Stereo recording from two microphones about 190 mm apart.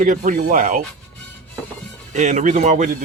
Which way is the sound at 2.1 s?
40° right (ahead or behind).